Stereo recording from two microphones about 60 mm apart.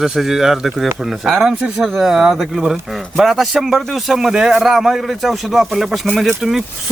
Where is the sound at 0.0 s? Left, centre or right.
Centre.